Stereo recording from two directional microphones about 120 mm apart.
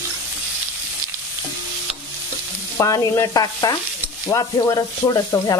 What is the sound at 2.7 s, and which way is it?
Stir, 30° left (ahead or behind).